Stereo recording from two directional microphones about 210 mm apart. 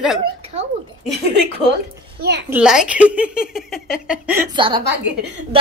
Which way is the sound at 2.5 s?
5° right (ahead or behind).